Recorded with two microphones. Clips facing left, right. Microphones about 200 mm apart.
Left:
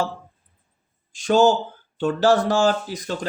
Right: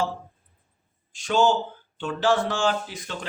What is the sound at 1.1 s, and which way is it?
Speech, 40° left (ahead or behind).